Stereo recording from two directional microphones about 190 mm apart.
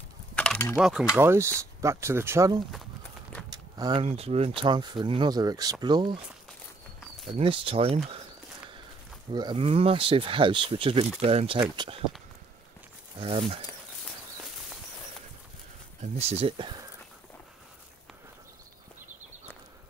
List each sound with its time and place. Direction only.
0.4 s mechanisms: 10° left (ahead or behind)
0.7 s speech: 5° right (ahead or behind); by 6.1 s 25° right (ahead or behind)
7.2 s speech: 30° right (ahead or behind)
9.3 s speech: 25° right (ahead or behind)
13.2 s speech: 30° right (ahead or behind)
16.0 s speech: 35° right (ahead or behind)